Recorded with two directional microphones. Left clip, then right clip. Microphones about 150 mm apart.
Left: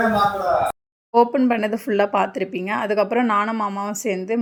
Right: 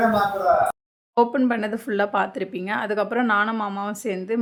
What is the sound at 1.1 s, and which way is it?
Speech, 10° left (ahead or behind).